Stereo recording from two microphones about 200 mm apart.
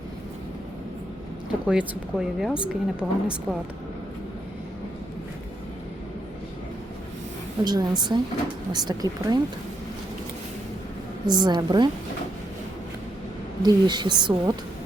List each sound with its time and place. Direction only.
1.6 s speech: 5° right (ahead or behind)
7.6 s a woman's voice: 20° right (ahead or behind)
11.3 s a woman's voice: 20° right (ahead or behind)
13.6 s a woman's voice: 20° right (ahead or behind)